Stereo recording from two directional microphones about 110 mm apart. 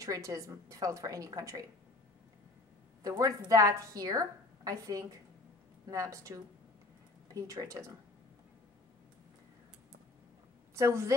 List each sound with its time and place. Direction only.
0.0 s a woman's voice: 30° right (ahead or behind)
3.0 s a woman's voice: 30° right (ahead or behind)
10.7 s a woman's voice: 25° right (ahead or behind)